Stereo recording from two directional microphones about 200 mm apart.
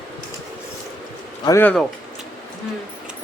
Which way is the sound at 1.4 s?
15° left (ahead or behind).